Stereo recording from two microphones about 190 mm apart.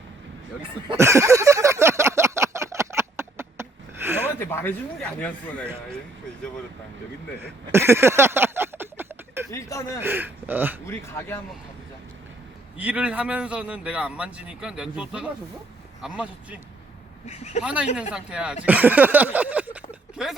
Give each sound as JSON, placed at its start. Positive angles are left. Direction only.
{"t": 0.9, "sound": "a sound", "side_deg": -15}
{"t": 4.4, "sound": "speech", "side_deg": 10}
{"t": 7.3, "sound": "a sound", "side_deg": -15}
{"t": 9.5, "sound": "speech", "side_deg": 15}
{"t": 10.0, "sound": "speech", "side_deg": -10}
{"t": 10.8, "sound": "speech", "side_deg": 15}
{"t": 12.7, "sound": "a man's voice", "side_deg": -10}
{"t": 17.2, "sound": "speech", "side_deg": 35}
{"t": 17.6, "sound": "a man's voice", "side_deg": -5}
{"t": 18.6, "sound": "a sound", "side_deg": -10}